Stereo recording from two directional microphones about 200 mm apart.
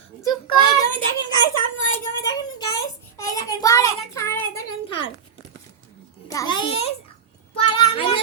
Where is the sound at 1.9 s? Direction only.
15° left (ahead or behind).